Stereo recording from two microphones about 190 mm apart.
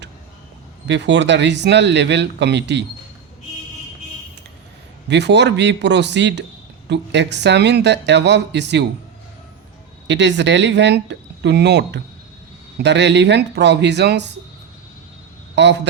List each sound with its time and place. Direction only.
0.9 s speech: 70° right (ahead or behind)
5.0 s speech: 65° right (ahead or behind)
10.1 s speech: 70° right (ahead or behind)
15.5 s speech: 65° right (ahead or behind)